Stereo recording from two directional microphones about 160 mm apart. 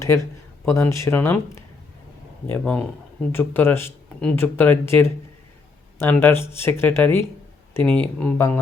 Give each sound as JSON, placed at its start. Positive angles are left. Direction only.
{"t": 0.0, "sound": "speech", "side_deg": 20}